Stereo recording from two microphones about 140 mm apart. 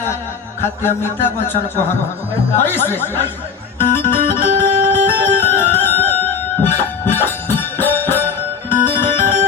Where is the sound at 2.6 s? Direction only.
15° left (ahead or behind).